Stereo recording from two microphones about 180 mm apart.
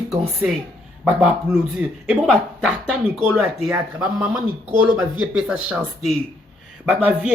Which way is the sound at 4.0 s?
15° right (ahead or behind).